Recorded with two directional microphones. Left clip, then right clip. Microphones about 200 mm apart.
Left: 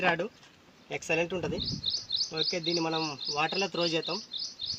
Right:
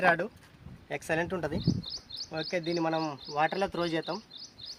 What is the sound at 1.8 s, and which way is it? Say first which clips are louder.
Bird: left 9 dB; 30° right (ahead or behind).